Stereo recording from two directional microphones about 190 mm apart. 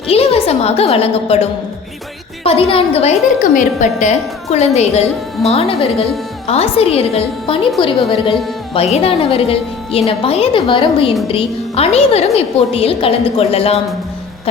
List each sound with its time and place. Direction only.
0.1 s a woman's voice: 30° left (ahead or behind)
8.7 s a woman's voice: 30° left (ahead or behind)